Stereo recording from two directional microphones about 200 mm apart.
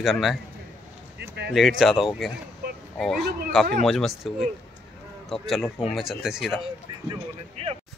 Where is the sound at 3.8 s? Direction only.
Centre (ahead or behind).